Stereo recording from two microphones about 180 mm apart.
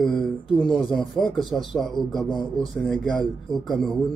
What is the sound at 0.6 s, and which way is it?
Speech, 25° left (ahead or behind).